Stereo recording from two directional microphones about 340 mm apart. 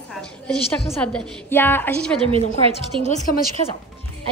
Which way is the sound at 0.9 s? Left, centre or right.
Centre.